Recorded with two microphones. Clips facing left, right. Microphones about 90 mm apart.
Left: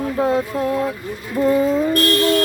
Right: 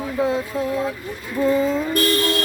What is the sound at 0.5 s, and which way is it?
Speech, 50° left (ahead or behind).